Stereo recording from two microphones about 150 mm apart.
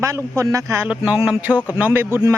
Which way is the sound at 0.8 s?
10° right (ahead or behind).